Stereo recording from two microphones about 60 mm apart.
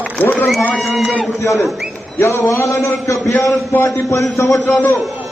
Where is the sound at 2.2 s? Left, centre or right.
Left.